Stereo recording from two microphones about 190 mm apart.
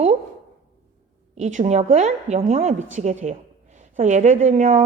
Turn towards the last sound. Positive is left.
turn(degrees=-40)  # may be behind; listen again after turning